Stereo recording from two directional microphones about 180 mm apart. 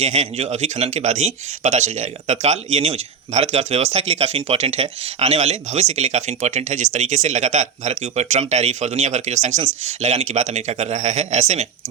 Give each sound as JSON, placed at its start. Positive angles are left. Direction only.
{"t": 0.0, "sound": "speech", "side_deg": -35}